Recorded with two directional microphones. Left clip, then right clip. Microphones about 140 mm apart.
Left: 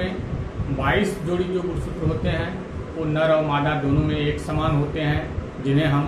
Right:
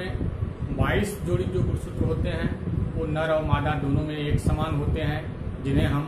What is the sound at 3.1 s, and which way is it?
A man's voice, 30° right (ahead or behind).